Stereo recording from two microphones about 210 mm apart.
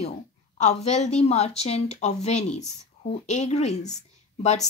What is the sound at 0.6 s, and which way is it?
Speech, 30° left (ahead or behind).